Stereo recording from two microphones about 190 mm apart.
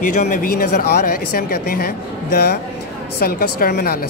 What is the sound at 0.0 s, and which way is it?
A woman's voice, 45° left (ahead or behind).